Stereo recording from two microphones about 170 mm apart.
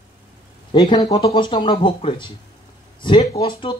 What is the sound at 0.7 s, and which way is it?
Speech, 30° left (ahead or behind).